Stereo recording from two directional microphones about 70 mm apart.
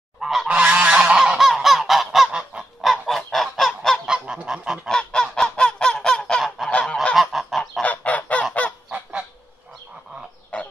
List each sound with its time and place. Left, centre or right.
0.2 s goose: centre
0.7 s goose: centre
1.1 s goose: centre
4.0 s goose: centre
4.8 s honk: centre
6.7 s goose: centre
7.2 s goose: centre
7.8 s goose: left
10.5 s fowl: centre